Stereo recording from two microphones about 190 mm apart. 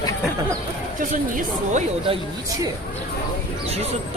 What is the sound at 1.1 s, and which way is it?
Speech, 40° right (ahead or behind).